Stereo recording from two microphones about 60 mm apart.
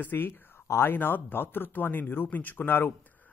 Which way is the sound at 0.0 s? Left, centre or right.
Left.